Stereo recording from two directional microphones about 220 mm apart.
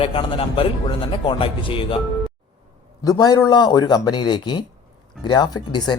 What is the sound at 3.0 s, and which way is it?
Speech, 15° left (ahead or behind).